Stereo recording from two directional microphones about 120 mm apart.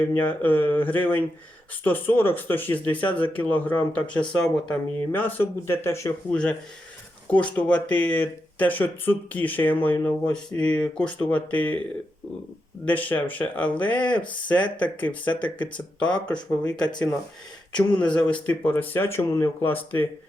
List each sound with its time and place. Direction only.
0.1 s speech: 15° left (ahead or behind)
6.3 s speech: 10° left (ahead or behind)
12.8 s speech: 15° left (ahead or behind)
18.0 s speech: 10° left (ahead or behind)